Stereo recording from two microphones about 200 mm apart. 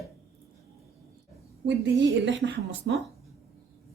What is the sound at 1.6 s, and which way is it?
A woman's voice, 65° right (ahead or behind).